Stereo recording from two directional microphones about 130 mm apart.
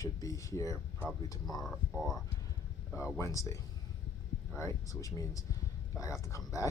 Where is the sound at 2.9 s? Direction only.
20° left (ahead or behind).